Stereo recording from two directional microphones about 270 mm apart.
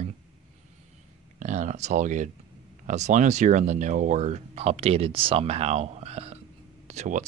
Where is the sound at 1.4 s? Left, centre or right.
Right.